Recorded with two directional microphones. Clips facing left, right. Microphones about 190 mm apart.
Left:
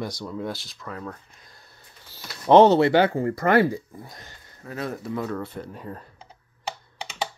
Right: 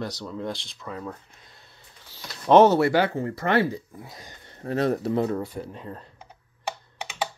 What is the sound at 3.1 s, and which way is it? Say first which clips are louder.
Speech: left 3 dB; 40° left (ahead or behind).